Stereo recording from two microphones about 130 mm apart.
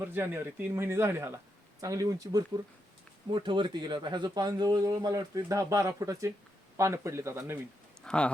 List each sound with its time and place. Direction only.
0.0 s speech: 15° right (ahead or behind)
8.0 s speech: 10° left (ahead or behind)